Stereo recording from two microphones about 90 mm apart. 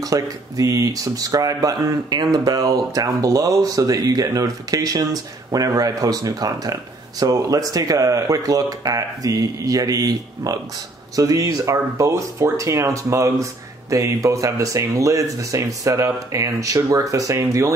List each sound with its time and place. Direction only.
0.0 s speech: 40° right (ahead or behind)